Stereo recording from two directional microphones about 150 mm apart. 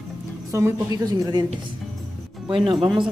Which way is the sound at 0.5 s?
20° right (ahead or behind).